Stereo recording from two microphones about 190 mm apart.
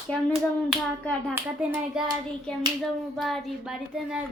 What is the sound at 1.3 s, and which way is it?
Speech, 10° right (ahead or behind).